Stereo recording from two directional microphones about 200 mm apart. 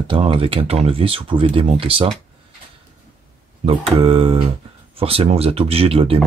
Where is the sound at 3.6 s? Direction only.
25° right (ahead or behind).